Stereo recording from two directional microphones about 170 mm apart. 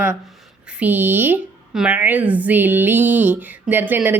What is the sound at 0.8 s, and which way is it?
A woman's voice, 10° right (ahead or behind).